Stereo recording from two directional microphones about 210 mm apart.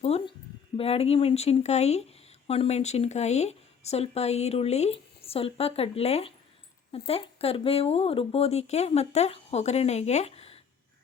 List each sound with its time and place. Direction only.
0.0 s speech: 30° left (ahead or behind)